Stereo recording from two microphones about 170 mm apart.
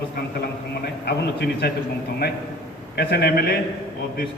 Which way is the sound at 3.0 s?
70° left (ahead or behind).